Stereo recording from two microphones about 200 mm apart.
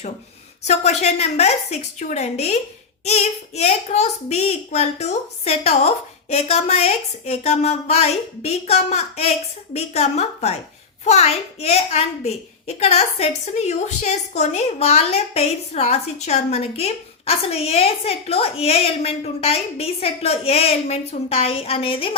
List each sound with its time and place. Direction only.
0.7 s a woman's voice: 35° left (ahead or behind)